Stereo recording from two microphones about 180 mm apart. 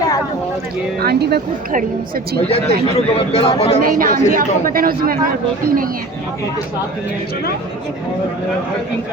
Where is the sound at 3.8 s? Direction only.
50° right (ahead or behind).